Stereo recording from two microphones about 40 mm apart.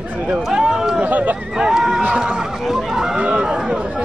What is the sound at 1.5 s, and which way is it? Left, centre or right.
Speech, centre.